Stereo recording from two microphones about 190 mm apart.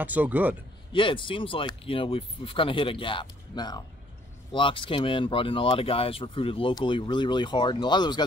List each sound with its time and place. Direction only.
0.0 s speech: 10° right (ahead or behind)
0.9 s speech: 25° left (ahead or behind)